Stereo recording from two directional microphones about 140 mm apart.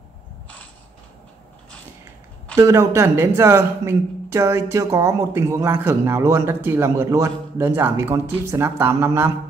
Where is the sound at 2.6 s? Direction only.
20° right (ahead or behind).